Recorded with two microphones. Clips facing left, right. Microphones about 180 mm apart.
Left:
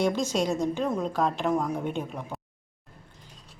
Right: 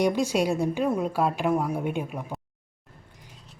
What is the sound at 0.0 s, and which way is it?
Speech, 15° right (ahead or behind).